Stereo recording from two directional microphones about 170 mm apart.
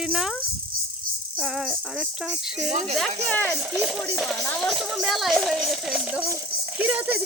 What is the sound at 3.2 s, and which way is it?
Speech, 10° left (ahead or behind).